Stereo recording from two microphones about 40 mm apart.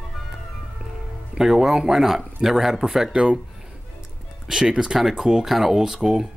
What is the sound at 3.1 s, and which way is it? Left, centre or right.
Speech, right.